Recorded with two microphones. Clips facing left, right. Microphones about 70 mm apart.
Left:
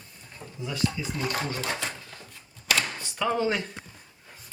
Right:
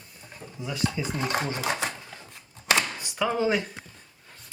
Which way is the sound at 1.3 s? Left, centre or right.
Right.